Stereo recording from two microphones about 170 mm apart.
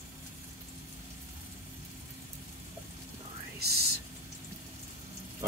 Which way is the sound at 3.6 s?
70° right (ahead or behind).